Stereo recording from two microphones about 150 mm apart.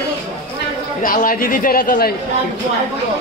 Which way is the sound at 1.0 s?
70° left (ahead or behind).